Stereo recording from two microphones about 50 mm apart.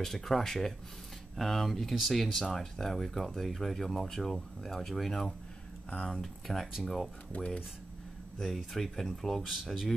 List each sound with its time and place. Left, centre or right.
0.0 s speech: centre
7.3 s speech: left
8.4 s speech: centre
9.6 s speech: centre